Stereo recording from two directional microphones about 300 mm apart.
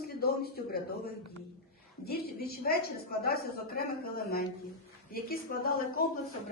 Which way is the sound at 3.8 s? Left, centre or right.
Left.